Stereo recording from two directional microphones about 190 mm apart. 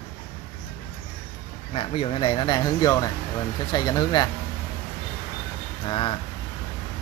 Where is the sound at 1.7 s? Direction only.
30° left (ahead or behind).